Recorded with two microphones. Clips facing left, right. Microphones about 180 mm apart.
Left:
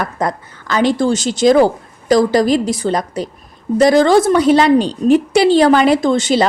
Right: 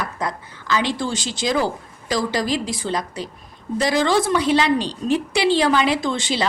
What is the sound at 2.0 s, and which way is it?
A woman's voice, 40° left (ahead or behind).